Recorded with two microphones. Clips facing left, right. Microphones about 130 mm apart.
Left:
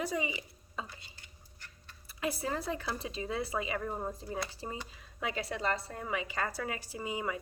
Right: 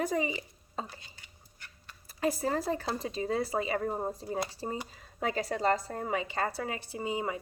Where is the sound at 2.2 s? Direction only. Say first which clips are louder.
Right 5 dB; 40° right (ahead or behind).